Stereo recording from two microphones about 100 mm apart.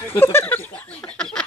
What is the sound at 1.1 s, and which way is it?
Snicker, 10° left (ahead or behind).